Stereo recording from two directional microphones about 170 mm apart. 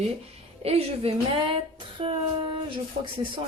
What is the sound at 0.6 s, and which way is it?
Speech, 35° right (ahead or behind).